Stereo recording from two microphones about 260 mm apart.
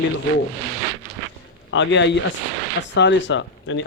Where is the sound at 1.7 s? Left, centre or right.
Left.